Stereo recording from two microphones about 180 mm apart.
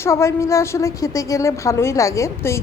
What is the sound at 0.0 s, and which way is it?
A woman's voice, 15° left (ahead or behind).